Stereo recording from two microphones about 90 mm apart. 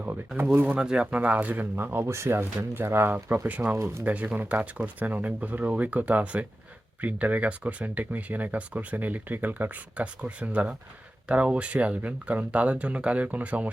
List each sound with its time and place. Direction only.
0.5 s speech: 20° right (ahead or behind)